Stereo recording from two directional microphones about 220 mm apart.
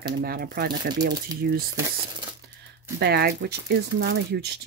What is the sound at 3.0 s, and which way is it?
Speech, 45° right (ahead or behind).